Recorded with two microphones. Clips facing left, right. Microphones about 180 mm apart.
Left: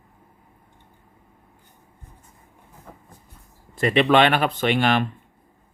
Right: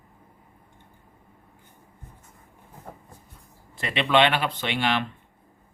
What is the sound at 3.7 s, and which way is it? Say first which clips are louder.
Speech: left 5 dB; 45° left (ahead or behind).